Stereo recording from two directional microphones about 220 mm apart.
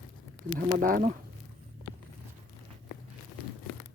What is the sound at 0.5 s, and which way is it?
Speech, 40° right (ahead or behind).